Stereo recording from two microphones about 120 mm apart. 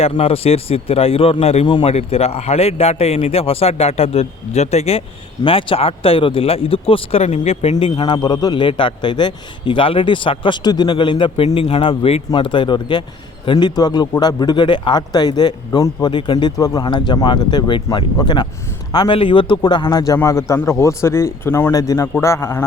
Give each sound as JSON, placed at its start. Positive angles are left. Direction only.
{"t": 0.0, "sound": "speech", "side_deg": 55}
{"t": 1.6, "sound": "a man's voice", "side_deg": 40}
{"t": 1.9, "sound": "speech", "side_deg": 60}
{"t": 5.4, "sound": "speech", "side_deg": 45}
{"t": 7.8, "sound": "a man's voice", "side_deg": 45}
{"t": 11.4, "sound": "a man's voice", "side_deg": 55}
{"t": 16.6, "sound": "a man's voice", "side_deg": 30}